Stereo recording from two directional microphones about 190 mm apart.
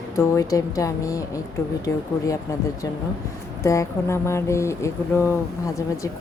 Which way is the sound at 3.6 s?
15° left (ahead or behind).